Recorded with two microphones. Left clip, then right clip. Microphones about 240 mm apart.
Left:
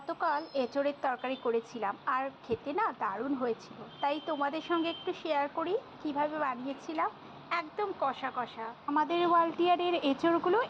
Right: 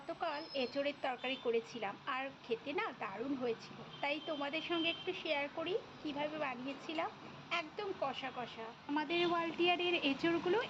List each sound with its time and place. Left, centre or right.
0.1 s a woman's voice: centre